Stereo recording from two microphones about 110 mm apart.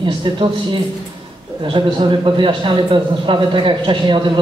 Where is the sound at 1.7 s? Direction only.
50° right (ahead or behind).